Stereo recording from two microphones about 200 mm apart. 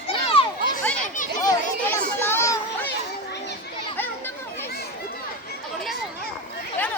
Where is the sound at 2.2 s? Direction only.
10° left (ahead or behind).